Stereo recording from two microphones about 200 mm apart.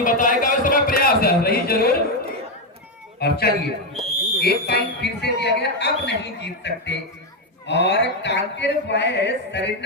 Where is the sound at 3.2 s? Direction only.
50° left (ahead or behind).